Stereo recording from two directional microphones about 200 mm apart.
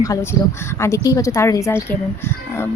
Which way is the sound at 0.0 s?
15° left (ahead or behind).